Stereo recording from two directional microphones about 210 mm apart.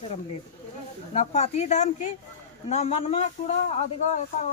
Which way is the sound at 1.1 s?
35° left (ahead or behind).